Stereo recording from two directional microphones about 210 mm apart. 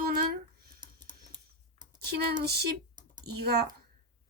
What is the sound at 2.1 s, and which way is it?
Speech, 50° right (ahead or behind).